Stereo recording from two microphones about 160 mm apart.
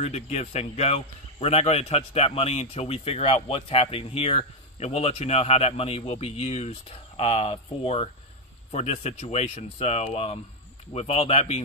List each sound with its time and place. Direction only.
0.0 s speech: 40° left (ahead or behind)